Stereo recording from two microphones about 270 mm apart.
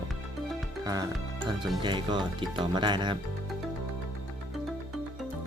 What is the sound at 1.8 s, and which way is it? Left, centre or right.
Speech, centre.